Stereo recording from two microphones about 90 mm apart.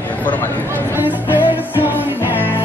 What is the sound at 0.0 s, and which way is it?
Speech, 20° left (ahead or behind).